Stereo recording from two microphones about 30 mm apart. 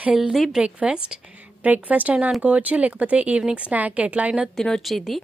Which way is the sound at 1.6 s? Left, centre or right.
Right.